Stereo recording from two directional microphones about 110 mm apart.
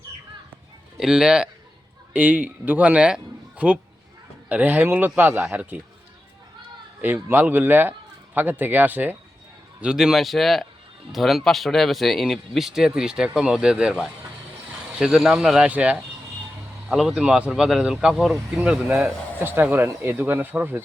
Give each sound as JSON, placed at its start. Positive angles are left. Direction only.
{"t": 0.9, "sound": "speech", "side_deg": -5}
{"t": 7.0, "sound": "speech", "side_deg": -20}
{"t": 9.8, "sound": "speech", "side_deg": -5}
{"t": 19.5, "sound": "speech", "side_deg": -20}